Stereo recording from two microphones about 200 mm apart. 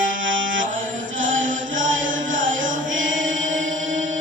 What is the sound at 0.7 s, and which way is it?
Chant, 70° right (ahead or behind).